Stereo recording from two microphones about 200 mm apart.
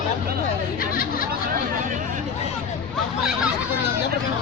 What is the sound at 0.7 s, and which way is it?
Chatter, 45° left (ahead or behind).